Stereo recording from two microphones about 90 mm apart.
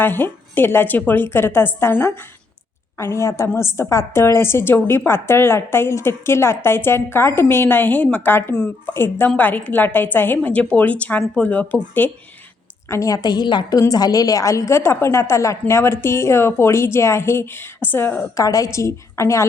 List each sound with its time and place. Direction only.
0.0 s a woman's voice: 25° left (ahead or behind)
12.9 s a woman's voice: 40° left (ahead or behind); by 13.7 s 55° left (ahead or behind)
13.7 s a woman's voice: 40° left (ahead or behind); by 18.2 s 25° left (ahead or behind)
18.3 s a woman's voice: 40° left (ahead or behind)